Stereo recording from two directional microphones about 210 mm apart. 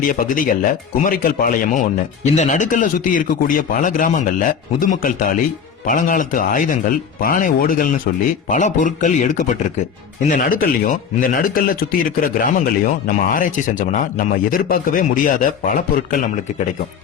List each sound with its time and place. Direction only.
0.0 s a man's voice: 40° left (ahead or behind)